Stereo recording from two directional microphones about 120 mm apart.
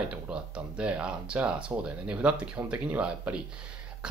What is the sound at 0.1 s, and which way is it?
Speech, 10° right (ahead or behind).